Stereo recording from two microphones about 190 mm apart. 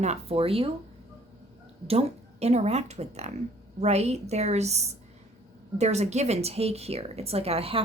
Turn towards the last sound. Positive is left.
turn(degrees=-30)  # may be behind; listen again after turning